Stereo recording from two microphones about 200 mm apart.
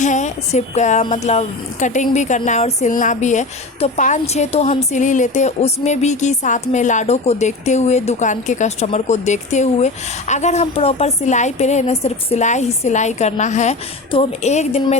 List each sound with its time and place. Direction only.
0.0 s a woman's voice: 35° left (ahead or behind)